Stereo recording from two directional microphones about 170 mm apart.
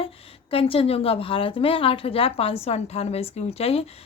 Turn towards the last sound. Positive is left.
turn(degrees=35)  # may be behind; listen again after turning